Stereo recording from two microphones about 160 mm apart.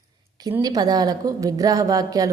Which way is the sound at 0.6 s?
25° right (ahead or behind).